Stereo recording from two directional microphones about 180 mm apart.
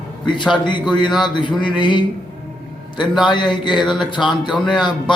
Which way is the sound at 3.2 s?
25° left (ahead or behind).